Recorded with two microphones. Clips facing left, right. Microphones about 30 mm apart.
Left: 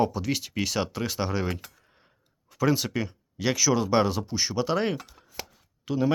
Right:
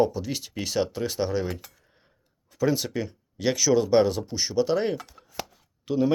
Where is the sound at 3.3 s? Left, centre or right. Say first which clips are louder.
Right 2 dB; centre.